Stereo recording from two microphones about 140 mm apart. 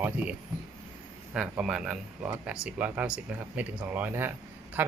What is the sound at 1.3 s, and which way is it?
Speech, 5° right (ahead or behind).